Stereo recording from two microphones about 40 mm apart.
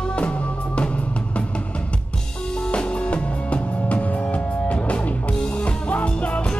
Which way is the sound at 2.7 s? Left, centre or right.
Left.